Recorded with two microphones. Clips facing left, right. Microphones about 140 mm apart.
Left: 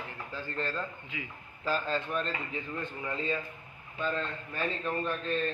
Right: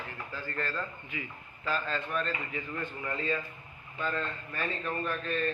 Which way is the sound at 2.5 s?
20° left (ahead or behind).